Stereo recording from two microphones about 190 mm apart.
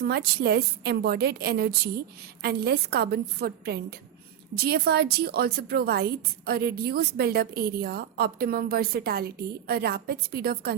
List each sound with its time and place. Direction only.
0.0 s a woman's voice: 60° right (ahead or behind)